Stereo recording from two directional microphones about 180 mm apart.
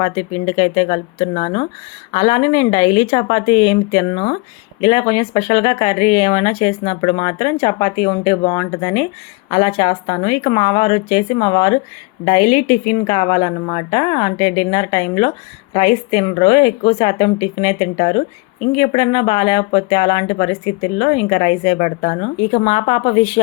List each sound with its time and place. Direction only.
0.0 s speech: 30° left (ahead or behind)